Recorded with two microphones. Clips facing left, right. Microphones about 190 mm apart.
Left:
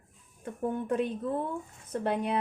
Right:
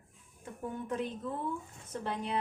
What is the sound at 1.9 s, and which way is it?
Speech, 60° left (ahead or behind).